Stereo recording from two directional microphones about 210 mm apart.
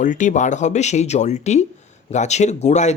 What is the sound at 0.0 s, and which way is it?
Speech, 35° left (ahead or behind).